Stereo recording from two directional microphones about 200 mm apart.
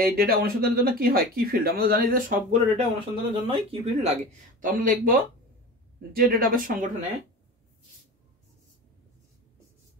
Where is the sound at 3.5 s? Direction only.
25° right (ahead or behind); by 6.9 s 45° right (ahead or behind).